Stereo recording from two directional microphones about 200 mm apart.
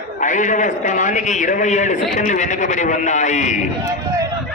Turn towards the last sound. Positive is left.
turn(degrees=35)  # may be behind; listen again after turning